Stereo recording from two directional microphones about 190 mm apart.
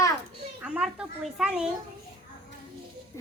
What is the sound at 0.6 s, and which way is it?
Speech, 5° right (ahead or behind).